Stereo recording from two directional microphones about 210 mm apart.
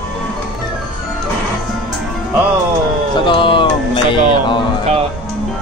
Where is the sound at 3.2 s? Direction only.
25° left (ahead or behind).